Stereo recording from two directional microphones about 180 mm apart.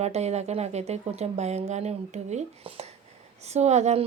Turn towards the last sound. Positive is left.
turn(degrees=-40)  # may be behind; listen again after turning